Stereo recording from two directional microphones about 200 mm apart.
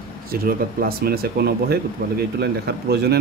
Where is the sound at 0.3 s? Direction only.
45° right (ahead or behind).